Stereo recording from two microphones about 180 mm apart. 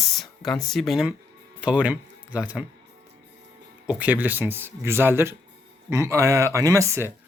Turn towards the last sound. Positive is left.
turn(degrees=-15)  # may be behind; listen again after turning